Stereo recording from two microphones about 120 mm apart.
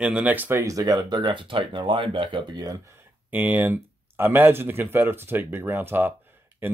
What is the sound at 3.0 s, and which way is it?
Speech, 15° right (ahead or behind).